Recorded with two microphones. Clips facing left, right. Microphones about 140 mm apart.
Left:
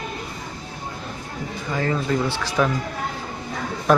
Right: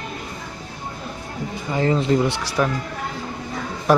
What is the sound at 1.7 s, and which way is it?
Speech, 25° right (ahead or behind).